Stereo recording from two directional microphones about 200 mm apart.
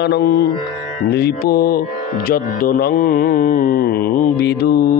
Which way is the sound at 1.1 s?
55° left (ahead or behind).